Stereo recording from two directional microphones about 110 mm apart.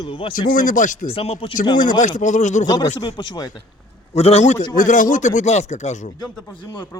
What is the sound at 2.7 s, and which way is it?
Speech, 35° left (ahead or behind).